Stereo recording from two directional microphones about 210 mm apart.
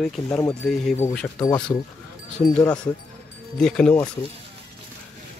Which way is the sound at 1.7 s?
20° left (ahead or behind).